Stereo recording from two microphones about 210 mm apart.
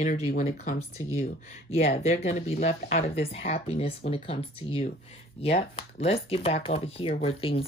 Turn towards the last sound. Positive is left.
turn(degrees=25)  # may be behind; listen again after turning